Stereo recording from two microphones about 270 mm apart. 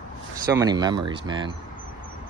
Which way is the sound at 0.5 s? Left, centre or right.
Centre.